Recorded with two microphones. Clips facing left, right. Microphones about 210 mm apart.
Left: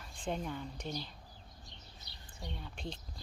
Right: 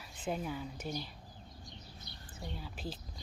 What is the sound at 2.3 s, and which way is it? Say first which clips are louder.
Speech: right 1 dB; 5° right (ahead or behind).